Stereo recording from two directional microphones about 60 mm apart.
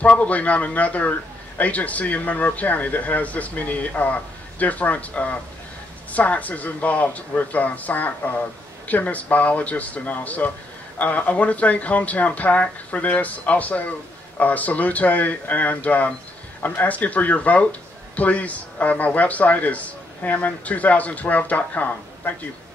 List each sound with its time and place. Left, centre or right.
0.0 s speech: left